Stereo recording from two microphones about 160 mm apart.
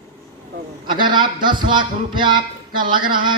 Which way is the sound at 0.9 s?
30° right (ahead or behind).